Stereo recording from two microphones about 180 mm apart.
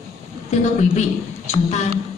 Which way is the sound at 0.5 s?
40° left (ahead or behind).